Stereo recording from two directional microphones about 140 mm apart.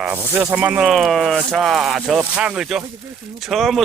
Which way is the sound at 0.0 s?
15° right (ahead or behind).